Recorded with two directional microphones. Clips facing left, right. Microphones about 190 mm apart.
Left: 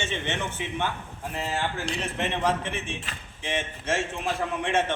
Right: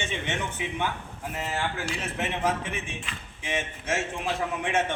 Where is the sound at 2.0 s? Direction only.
10° right (ahead or behind).